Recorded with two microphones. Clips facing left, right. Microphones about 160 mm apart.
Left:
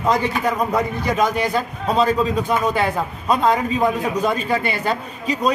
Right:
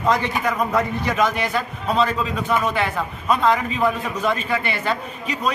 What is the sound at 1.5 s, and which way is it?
A man's voice, 35° left (ahead or behind).